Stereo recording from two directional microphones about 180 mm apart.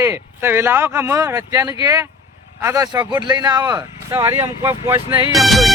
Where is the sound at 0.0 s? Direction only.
10° right (ahead or behind).